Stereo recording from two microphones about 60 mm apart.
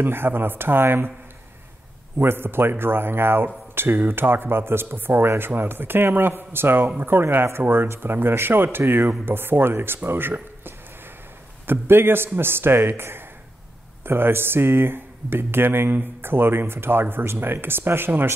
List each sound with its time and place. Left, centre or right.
0.0 s speech: right
2.1 s speech: right